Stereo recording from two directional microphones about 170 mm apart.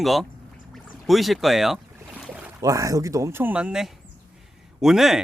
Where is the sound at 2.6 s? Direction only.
20° right (ahead or behind).